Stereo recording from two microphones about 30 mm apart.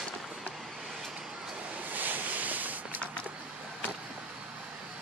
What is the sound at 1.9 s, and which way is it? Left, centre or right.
Ocean, right.